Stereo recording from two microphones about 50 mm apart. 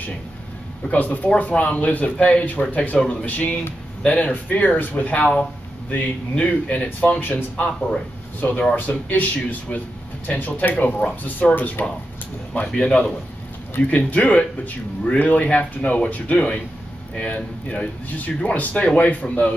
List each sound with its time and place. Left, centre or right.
0.8 s speech: left
3.3 s speech: left
7.2 s speech: left
12.7 s speech: centre
13.7 s speech: left